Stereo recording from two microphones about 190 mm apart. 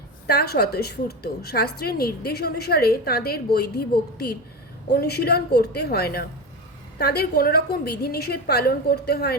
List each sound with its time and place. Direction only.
0.3 s a woman's voice: 55° left (ahead or behind)